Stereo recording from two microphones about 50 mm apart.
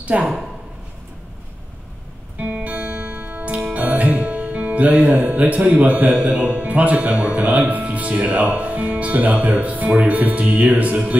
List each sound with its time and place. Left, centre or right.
0.0 s speech: right
2.3 s music: right
6.2 s speech: right